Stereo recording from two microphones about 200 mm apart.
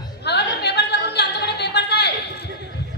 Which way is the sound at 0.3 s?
55° left (ahead or behind).